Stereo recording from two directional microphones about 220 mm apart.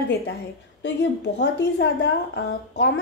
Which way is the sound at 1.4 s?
50° left (ahead or behind).